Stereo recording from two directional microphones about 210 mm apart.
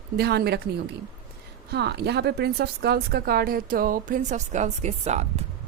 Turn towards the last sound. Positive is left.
turn(degrees=-30)  # may be behind; listen again after turning